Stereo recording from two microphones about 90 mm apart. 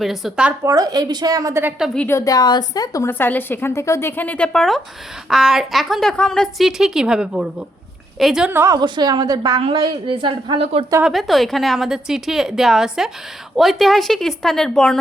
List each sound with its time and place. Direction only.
0.0 s a woman's voice: centre (ahead or behind)
0.6 s speech: 40° right (ahead or behind)
2.0 s a woman's voice: 35° left (ahead or behind)
2.3 s speech: 50° left (ahead or behind)
3.1 s a woman's voice: 20° left (ahead or behind)
3.7 s a woman's voice: 35° left (ahead or behind); by 4.8 s 5° left (ahead or behind)
5.3 s a woman's voice: 5° right (ahead or behind)
6.7 s a woman's voice: 5° right (ahead or behind)
8.8 s speech: 55° right (ahead or behind)
9.7 s a woman's voice: 60° right (ahead or behind); by 10.8 s 90° right
11.0 s a woman's voice: centre (ahead or behind)